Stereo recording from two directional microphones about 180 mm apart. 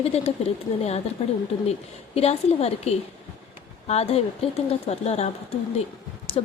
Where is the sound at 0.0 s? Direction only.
35° left (ahead or behind).